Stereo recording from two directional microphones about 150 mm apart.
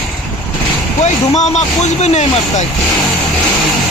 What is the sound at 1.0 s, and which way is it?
Speech, 50° left (ahead or behind).